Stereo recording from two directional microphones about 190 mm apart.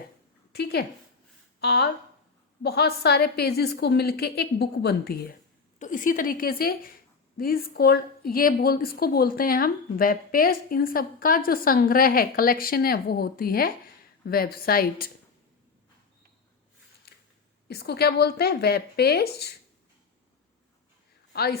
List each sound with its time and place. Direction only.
0.5 s a woman's voice: 60° left (ahead or behind)
5.8 s a woman's voice: 45° left (ahead or behind)
17.7 s a woman's voice: 55° left (ahead or behind)
21.3 s a woman's voice: 55° left (ahead or behind)